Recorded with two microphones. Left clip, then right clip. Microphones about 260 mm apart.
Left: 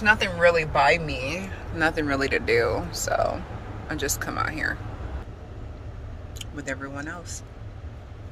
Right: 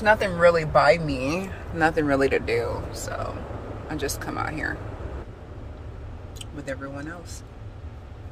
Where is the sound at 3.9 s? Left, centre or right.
Centre.